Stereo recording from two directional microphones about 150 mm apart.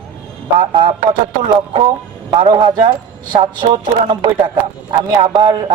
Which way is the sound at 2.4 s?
30° right (ahead or behind).